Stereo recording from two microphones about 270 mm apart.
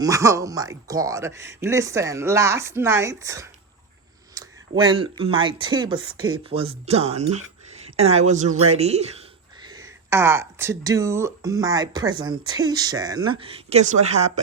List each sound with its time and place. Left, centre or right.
0.0 s speech: centre